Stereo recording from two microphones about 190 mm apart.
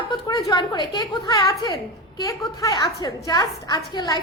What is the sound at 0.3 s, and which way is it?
A woman's voice, 20° left (ahead or behind).